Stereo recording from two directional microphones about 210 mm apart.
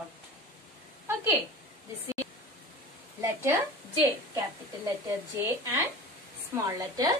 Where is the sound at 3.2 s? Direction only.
15° right (ahead or behind).